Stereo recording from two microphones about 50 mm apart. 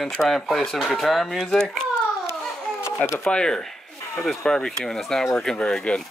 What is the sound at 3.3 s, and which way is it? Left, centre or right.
Speech, centre.